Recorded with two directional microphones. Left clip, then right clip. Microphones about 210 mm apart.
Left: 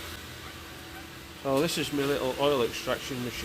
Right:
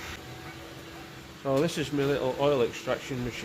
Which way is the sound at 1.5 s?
10° left (ahead or behind).